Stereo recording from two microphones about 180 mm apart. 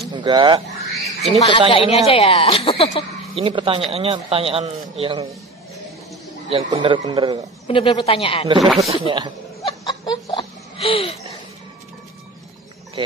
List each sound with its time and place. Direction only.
0.1 s speech: 25° right (ahead or behind)
0.9 s a sound: centre (ahead or behind)
1.7 s a woman's voice: 30° left (ahead or behind)
3.3 s a man's voice: 30° right (ahead or behind)
6.5 s a man's voice: 25° right (ahead or behind)
7.6 s a woman's voice: 30° left (ahead or behind)
8.5 s speech: centre (ahead or behind)
8.9 s a man's voice: 30° right (ahead or behind)
9.8 s a sound: 25° left (ahead or behind)